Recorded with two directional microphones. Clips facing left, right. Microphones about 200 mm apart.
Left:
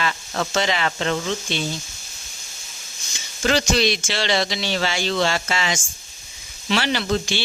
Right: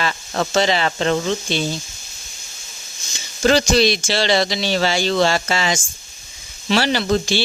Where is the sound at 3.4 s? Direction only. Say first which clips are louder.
Right 5 dB; 35° right (ahead or behind).